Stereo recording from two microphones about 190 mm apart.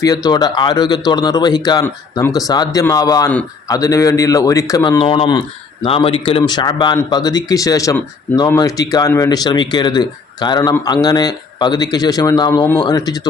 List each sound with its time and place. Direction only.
0.0 s a man's voice: 20° left (ahead or behind)